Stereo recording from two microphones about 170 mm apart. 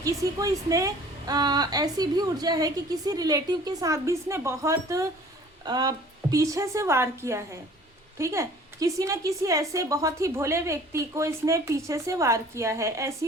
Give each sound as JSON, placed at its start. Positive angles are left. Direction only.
{"t": 0.0, "sound": "a woman's voice", "side_deg": -20}